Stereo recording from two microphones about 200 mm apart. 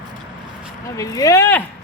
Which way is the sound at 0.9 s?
15° left (ahead or behind).